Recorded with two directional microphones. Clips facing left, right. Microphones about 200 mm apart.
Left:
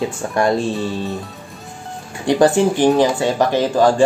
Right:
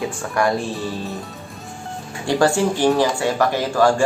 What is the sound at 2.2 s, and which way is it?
Speech, 20° left (ahead or behind).